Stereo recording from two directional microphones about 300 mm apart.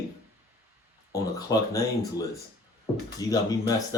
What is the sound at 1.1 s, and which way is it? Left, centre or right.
Speech, centre.